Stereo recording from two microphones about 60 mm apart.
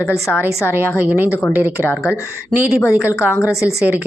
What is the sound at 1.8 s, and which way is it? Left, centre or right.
Speech, left.